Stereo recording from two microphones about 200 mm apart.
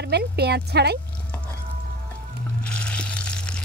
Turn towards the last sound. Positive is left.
turn(degrees=5)  # may be behind; listen again after turning